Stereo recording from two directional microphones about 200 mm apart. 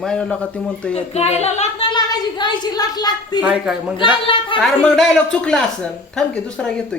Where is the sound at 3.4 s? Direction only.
5° right (ahead or behind).